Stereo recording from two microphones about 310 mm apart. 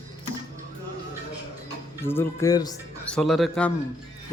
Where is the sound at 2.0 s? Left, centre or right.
Centre.